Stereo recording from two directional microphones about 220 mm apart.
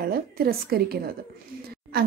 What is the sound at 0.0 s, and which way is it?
A woman's voice, 45° right (ahead or behind).